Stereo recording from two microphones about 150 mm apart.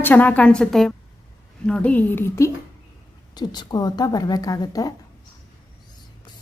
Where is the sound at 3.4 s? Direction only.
25° left (ahead or behind).